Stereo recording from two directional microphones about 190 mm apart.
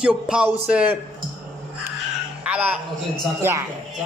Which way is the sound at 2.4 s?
5° right (ahead or behind).